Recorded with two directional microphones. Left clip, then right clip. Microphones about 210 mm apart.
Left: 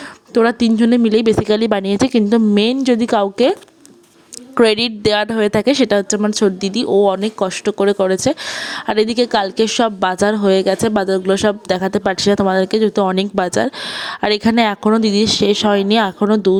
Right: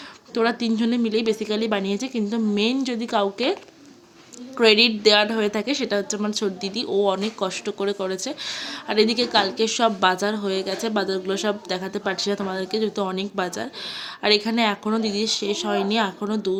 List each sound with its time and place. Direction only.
0.3 s a woman's voice: 40° left (ahead or behind)